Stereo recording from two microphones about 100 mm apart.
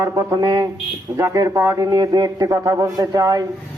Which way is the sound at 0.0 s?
35° right (ahead or behind).